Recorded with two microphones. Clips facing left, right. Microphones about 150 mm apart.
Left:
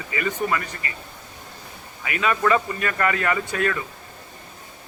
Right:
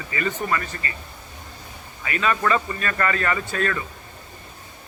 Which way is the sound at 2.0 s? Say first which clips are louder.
Left 1 dB; 10° left (ahead or behind).